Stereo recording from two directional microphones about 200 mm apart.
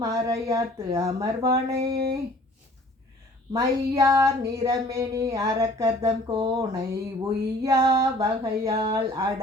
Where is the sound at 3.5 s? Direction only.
20° right (ahead or behind).